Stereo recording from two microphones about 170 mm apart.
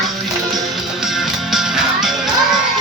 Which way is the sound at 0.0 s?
Centre (ahead or behind).